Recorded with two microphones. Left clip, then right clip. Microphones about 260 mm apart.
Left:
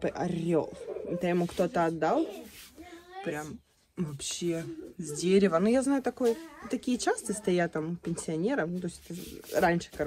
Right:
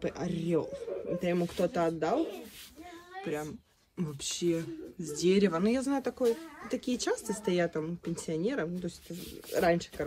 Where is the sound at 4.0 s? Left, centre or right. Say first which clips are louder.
Right 1 dB; centre.